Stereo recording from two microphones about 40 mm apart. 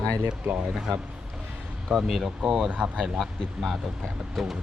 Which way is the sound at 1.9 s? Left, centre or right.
Centre.